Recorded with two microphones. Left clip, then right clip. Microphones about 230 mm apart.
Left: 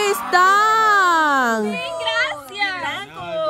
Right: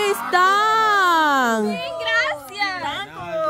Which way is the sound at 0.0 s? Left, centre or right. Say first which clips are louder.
Left 2 dB; centre.